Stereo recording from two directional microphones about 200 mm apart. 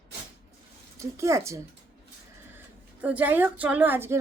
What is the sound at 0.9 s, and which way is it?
Speech, 15° right (ahead or behind).